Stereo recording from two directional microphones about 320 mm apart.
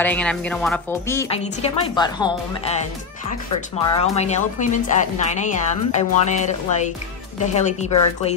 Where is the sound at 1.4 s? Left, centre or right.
Centre.